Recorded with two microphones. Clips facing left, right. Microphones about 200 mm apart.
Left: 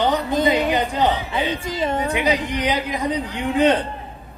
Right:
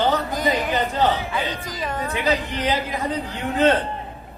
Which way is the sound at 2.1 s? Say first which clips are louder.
Left 2 dB; 15° left (ahead or behind).